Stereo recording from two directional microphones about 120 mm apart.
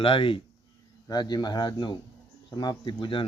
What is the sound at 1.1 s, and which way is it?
Speech, 35° left (ahead or behind).